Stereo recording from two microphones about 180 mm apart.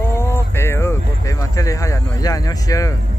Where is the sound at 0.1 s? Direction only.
15° left (ahead or behind).